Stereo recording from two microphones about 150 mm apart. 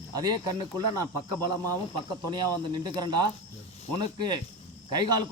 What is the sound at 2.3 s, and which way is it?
Speech, 30° right (ahead or behind).